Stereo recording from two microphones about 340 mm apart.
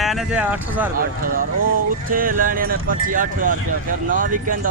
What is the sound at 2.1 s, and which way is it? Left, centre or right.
Speech, right.